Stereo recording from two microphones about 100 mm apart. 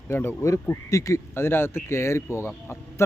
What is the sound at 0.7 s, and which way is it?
A man's voice, 35° left (ahead or behind).